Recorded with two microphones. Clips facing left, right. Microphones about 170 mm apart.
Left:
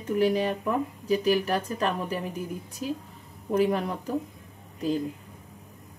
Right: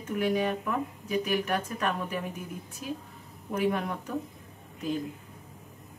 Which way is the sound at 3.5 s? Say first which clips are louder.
Left 4 dB; 35° left (ahead or behind).